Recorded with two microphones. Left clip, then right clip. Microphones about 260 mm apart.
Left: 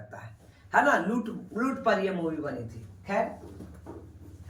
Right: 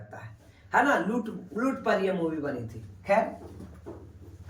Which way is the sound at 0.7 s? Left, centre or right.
Centre.